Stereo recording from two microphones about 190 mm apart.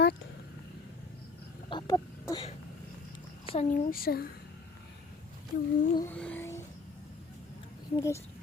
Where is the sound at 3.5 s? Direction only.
35° left (ahead or behind); by 4.3 s 50° left (ahead or behind).